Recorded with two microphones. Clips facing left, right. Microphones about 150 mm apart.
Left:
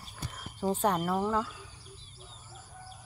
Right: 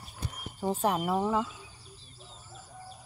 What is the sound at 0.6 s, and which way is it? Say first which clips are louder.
Speech: even; 5° right (ahead or behind).